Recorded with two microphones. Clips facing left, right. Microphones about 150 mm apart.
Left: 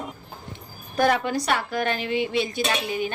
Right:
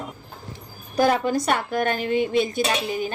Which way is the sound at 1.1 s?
40° right (ahead or behind).